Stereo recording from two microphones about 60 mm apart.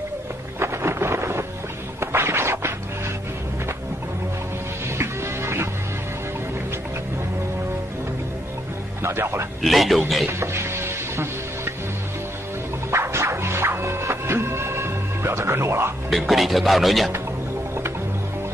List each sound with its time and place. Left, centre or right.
0.6 s music: right
2.0 s a sound: right
4.9 s music: right
9.0 s a man's voice: right
9.6 s speech: centre
10.2 s music: right
12.9 s music: right
16.1 s speech: centre